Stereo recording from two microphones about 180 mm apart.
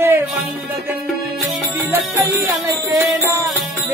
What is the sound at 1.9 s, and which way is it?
Music, 15° right (ahead or behind).